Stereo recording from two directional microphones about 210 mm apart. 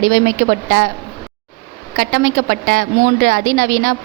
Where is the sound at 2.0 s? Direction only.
45° right (ahead or behind).